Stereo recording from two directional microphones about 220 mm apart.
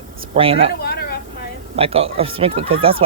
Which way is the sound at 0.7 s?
45° left (ahead or behind).